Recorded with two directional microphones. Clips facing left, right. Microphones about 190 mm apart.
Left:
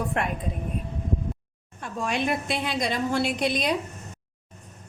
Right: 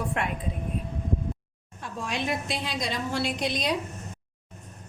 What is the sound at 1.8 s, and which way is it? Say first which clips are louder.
A woman's voice: left 4 dB; 55° left (ahead or behind).